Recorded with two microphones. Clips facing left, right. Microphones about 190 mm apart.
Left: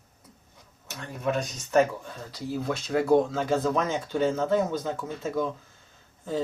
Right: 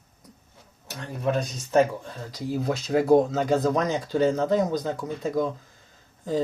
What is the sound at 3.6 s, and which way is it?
Speech, 40° right (ahead or behind).